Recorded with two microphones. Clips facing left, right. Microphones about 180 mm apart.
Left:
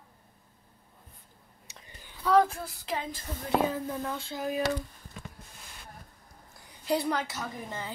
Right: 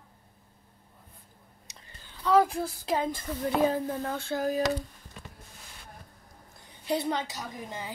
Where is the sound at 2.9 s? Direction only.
45° right (ahead or behind).